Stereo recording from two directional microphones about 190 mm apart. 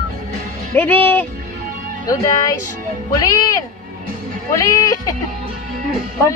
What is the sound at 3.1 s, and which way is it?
Speech, 20° left (ahead or behind).